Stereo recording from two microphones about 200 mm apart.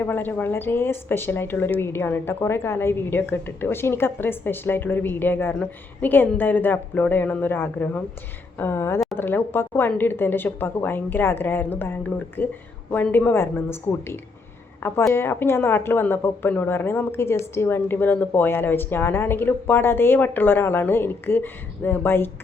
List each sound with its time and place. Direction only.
0.0 s a woman's voice: 10° left (ahead or behind)